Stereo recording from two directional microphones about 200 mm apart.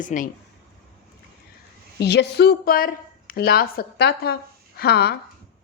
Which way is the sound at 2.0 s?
55° left (ahead or behind).